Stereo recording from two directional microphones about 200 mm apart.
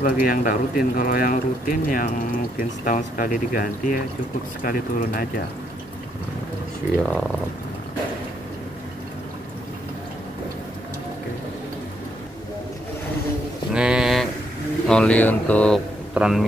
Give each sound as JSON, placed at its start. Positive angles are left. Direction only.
{"t": 0.0, "sound": "speech", "side_deg": 45}
{"t": 7.0, "sound": "speech", "side_deg": 5}
{"t": 13.7, "sound": "a sound", "side_deg": -5}
{"t": 14.9, "sound": "speech", "side_deg": 5}